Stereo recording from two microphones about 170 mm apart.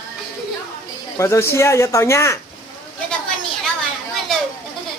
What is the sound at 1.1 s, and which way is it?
Speech, 15° left (ahead or behind).